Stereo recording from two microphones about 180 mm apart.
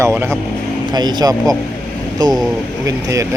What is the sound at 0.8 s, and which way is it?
Speech, 25° right (ahead or behind).